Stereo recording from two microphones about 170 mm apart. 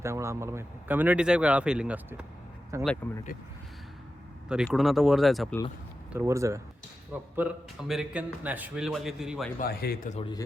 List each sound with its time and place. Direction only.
0.0 s speech: 15° right (ahead or behind)
2.8 s speech: 10° left (ahead or behind)
4.4 s a man's voice: 5° right (ahead or behind)
6.1 s a man's voice: 15° right (ahead or behind)
9.6 s speech: 65° left (ahead or behind)